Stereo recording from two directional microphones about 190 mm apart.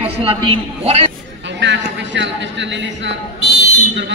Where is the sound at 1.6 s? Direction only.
70° right (ahead or behind).